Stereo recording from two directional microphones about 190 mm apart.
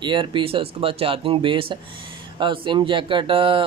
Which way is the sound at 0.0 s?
25° right (ahead or behind).